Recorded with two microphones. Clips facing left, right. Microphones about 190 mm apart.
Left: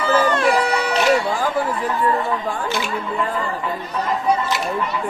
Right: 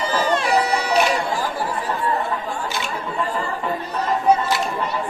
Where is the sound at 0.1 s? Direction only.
50° left (ahead or behind).